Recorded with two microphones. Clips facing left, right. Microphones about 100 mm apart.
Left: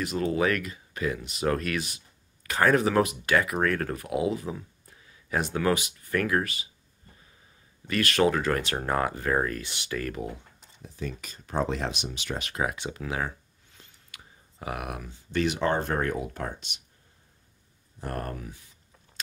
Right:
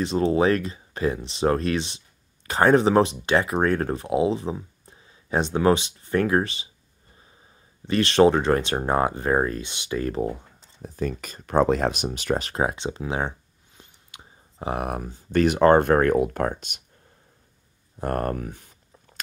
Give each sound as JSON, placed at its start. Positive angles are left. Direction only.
{"t": 0.0, "sound": "speech", "side_deg": -30}
{"t": 7.8, "sound": "speech", "side_deg": -25}
{"t": 10.8, "sound": "speech", "side_deg": -50}
{"t": 18.0, "sound": "speech", "side_deg": -50}